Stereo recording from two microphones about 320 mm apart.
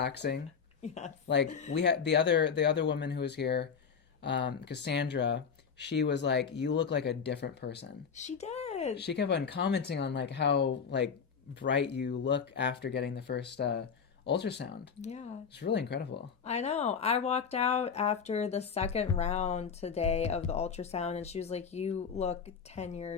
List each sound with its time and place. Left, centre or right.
0.0 s speech: left
0.8 s speech: left
1.3 s speech: left
9.0 s speech: left
15.1 s speech: left
15.5 s speech: left
16.4 s speech: left